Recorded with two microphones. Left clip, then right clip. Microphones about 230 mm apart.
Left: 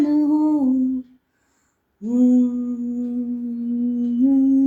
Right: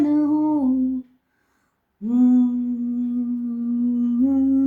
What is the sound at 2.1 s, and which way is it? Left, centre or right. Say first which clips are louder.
Humming: left 1 dB; right.